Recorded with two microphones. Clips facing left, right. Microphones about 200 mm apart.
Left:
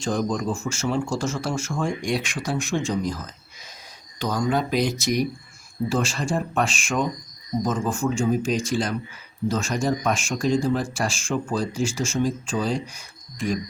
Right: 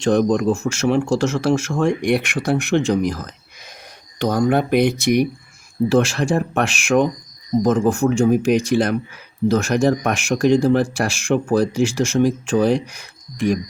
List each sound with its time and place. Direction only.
0.0 s speech: 70° right (ahead or behind)
4.2 s speech: 60° right (ahead or behind)
5.9 s speech: 75° right (ahead or behind)